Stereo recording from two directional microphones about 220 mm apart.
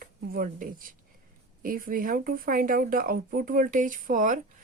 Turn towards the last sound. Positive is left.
turn(degrees=-35)  # may be behind; listen again after turning